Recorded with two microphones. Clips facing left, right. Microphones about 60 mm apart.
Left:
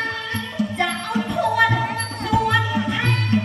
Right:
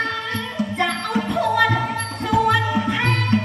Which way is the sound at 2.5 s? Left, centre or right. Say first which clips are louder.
Right 2 dB; right.